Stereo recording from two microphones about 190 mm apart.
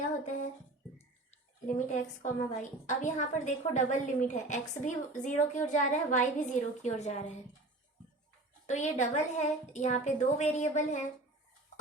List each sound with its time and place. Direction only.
1.6 s a woman's voice: 40° left (ahead or behind)
8.6 s a woman's voice: 40° left (ahead or behind)